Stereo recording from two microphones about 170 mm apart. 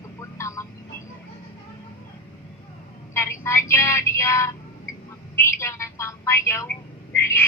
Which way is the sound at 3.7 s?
15° left (ahead or behind).